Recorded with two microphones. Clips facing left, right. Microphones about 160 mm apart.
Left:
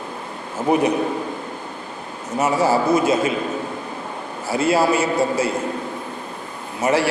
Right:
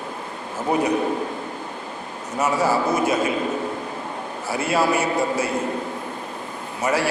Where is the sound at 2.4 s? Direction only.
25° left (ahead or behind).